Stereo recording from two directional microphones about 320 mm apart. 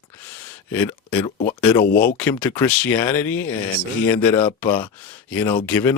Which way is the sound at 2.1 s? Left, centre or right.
Centre.